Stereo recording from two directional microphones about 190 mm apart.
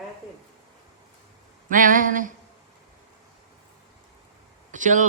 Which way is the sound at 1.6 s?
45° right (ahead or behind).